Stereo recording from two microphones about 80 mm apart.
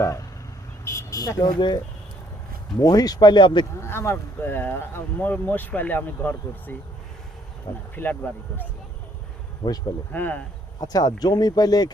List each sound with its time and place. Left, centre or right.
0.0 s speech: left
0.9 s vehicle: left
1.4 s speech: left
3.8 s speech: left
7.9 s speech: left
9.6 s speech: left
10.1 s speech: left
10.8 s speech: left